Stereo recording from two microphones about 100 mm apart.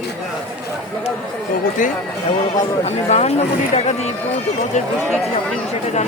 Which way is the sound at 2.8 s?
90° left.